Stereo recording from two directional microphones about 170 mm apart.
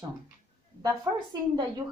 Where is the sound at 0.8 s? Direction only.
20° right (ahead or behind).